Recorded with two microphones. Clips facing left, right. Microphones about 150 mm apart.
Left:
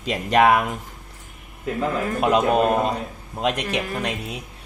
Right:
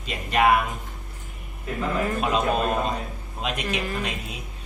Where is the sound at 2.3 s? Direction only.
15° left (ahead or behind).